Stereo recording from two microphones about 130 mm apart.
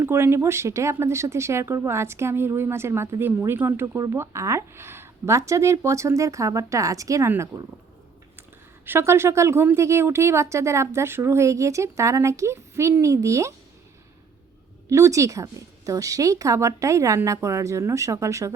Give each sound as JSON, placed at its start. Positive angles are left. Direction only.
{"t": 0.0, "sound": "speech", "side_deg": -20}
{"t": 8.9, "sound": "speech", "side_deg": -20}
{"t": 14.8, "sound": "speech", "side_deg": -20}